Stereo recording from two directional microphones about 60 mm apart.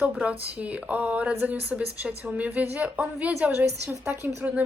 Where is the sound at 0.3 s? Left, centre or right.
Right.